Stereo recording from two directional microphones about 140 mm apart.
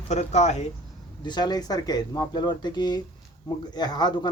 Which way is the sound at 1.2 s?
30° left (ahead or behind).